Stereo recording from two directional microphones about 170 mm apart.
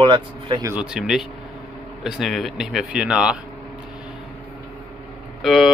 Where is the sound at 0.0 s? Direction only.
25° right (ahead or behind).